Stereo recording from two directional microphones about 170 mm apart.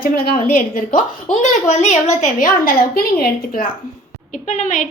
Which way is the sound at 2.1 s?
55° left (ahead or behind).